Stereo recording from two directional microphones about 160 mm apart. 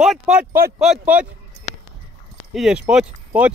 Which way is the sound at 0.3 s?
10° right (ahead or behind).